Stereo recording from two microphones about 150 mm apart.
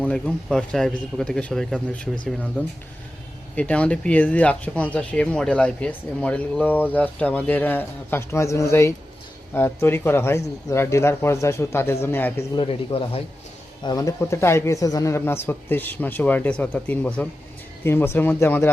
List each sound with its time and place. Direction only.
0.0 s speech: 5° left (ahead or behind)
12.5 s speech: 35° left (ahead or behind)
13.8 s speech: 25° left (ahead or behind)